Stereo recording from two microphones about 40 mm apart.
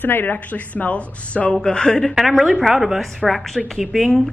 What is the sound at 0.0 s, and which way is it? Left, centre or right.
Speech, left.